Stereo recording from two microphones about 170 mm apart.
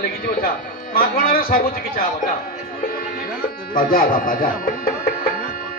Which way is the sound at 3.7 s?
55° left (ahead or behind).